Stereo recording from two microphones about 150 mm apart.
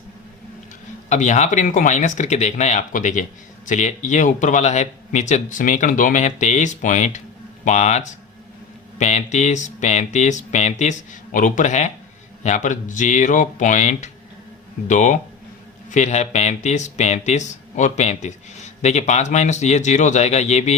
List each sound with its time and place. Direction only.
1.1 s speech: 55° left (ahead or behind)